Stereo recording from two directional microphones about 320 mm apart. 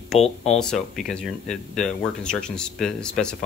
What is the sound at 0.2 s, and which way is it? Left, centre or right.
Speech, centre.